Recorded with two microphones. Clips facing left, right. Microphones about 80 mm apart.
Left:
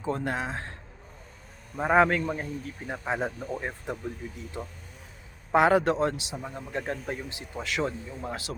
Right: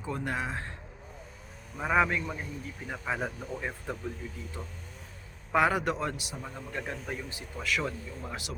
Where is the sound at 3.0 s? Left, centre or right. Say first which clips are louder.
Left 3 dB; left.